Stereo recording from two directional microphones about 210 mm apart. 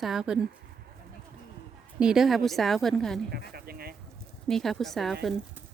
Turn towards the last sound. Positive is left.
turn(degrees=0)  # may be behind; listen again after turning